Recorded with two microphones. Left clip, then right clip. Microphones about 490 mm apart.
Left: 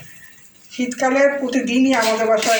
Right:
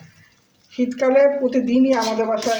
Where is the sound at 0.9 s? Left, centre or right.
Right.